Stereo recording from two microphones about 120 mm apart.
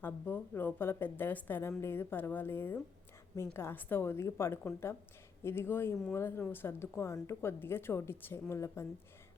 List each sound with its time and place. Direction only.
0.0 s a woman's voice: 15° left (ahead or behind)